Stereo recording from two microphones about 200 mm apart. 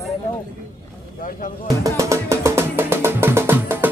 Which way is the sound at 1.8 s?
15° right (ahead or behind).